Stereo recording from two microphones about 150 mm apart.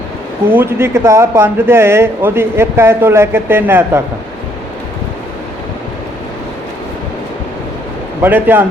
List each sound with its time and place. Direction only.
0.5 s speech: 15° right (ahead or behind)
8.2 s speech: 15° right (ahead or behind)